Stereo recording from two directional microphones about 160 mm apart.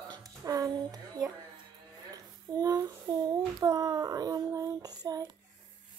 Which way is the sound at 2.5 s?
25° right (ahead or behind).